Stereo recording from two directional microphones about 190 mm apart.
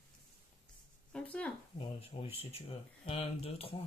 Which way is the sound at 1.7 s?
30° left (ahead or behind).